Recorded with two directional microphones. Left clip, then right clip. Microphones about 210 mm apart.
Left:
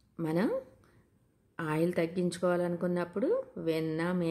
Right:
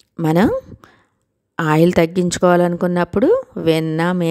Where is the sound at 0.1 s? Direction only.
50° right (ahead or behind).